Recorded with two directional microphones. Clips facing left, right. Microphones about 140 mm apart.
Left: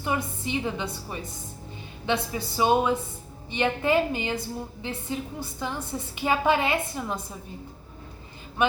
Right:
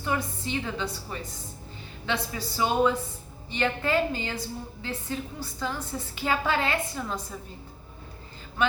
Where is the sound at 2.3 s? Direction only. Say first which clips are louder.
Left 5 dB; 20° left (ahead or behind).